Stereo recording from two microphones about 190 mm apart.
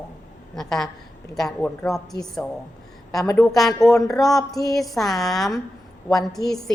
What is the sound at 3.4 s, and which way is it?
A woman's voice, centre (ahead or behind).